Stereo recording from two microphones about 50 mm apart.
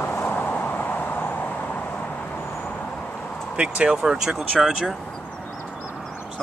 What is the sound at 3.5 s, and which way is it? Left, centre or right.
Speech, right.